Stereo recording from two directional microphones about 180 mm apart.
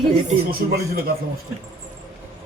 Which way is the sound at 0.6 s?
55° right (ahead or behind).